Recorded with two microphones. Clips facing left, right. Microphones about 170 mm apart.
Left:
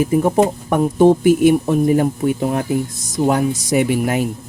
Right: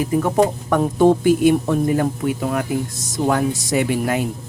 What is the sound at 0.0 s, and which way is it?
Speech, 20° left (ahead or behind).